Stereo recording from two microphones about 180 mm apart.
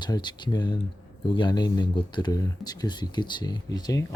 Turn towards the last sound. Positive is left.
turn(degrees=20)  # may be behind; listen again after turning